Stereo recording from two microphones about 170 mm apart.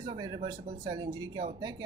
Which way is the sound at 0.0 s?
25° right (ahead or behind).